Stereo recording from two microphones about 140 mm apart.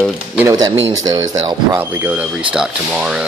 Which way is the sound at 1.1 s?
25° right (ahead or behind).